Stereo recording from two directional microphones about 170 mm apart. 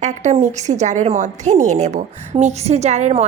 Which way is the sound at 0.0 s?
40° right (ahead or behind).